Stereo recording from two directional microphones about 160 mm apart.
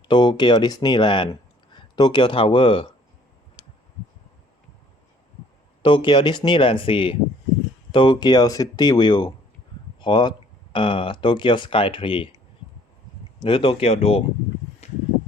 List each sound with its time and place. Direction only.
0.1 s speech: 30° left (ahead or behind)
5.8 s speech: 30° left (ahead or behind)
13.4 s speech: 30° left (ahead or behind)
14.8 s a sound: 40° left (ahead or behind)